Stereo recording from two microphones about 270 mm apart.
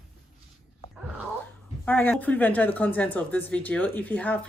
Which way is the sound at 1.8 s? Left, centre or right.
Centre.